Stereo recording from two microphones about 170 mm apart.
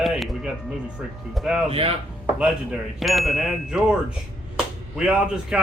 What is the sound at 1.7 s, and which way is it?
Speech, 35° right (ahead or behind).